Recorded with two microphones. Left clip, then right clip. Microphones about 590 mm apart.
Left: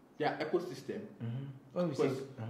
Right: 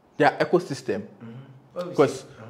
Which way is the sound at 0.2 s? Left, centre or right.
Right.